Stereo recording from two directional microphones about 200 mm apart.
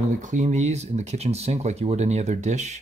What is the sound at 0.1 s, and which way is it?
Speech, 40° right (ahead or behind).